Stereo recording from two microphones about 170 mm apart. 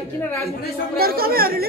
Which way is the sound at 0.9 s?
65° right (ahead or behind).